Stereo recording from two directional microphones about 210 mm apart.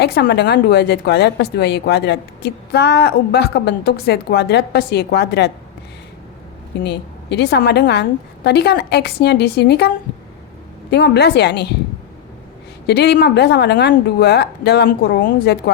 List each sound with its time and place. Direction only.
0.0 s a woman's voice: 50° left (ahead or behind)
6.8 s a woman's voice: 55° left (ahead or behind)
10.9 s a woman's voice: 50° left (ahead or behind)
12.9 s a woman's voice: 50° left (ahead or behind)